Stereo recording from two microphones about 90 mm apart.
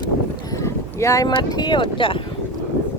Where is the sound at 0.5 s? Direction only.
35° left (ahead or behind); by 2.2 s 75° left (ahead or behind).